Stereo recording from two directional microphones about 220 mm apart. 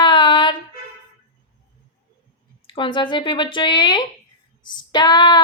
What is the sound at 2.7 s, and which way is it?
A woman's voice, 20° left (ahead or behind).